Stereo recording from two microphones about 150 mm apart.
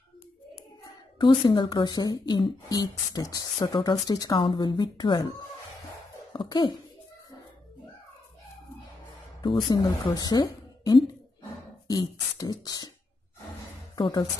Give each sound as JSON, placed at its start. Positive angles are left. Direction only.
{"t": 1.1, "sound": "speech", "side_deg": 30}
{"t": 9.6, "sound": "a woman's voice", "side_deg": 30}
{"t": 13.9, "sound": "speech", "side_deg": 30}